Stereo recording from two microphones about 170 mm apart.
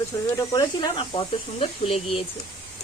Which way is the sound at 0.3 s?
25° left (ahead or behind).